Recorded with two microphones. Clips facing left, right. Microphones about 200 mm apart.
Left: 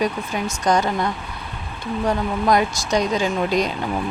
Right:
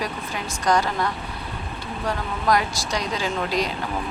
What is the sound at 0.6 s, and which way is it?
Speech, 20° left (ahead or behind).